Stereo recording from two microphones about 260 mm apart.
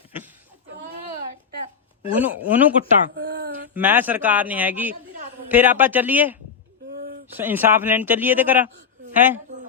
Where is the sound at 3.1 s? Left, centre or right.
Right.